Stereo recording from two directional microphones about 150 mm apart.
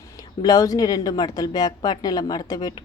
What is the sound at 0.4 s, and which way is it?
Speech, 25° left (ahead or behind).